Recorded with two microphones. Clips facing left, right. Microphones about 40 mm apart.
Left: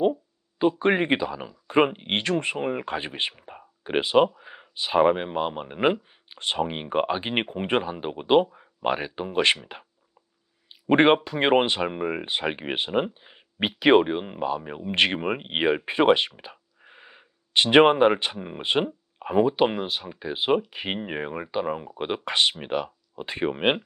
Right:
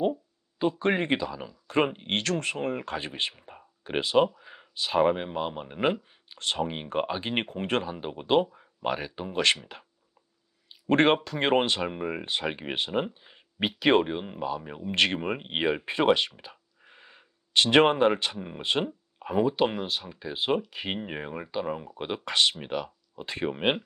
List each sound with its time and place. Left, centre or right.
0.6 s speech: centre
10.7 s speech: left